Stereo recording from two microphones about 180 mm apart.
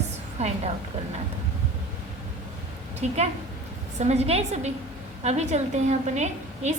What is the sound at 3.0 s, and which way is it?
A woman's voice, 40° right (ahead or behind).